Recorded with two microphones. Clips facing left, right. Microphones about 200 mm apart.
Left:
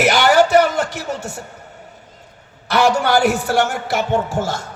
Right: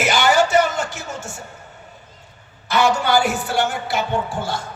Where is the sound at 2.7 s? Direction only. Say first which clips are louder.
Left 2 dB; 65° left (ahead or behind).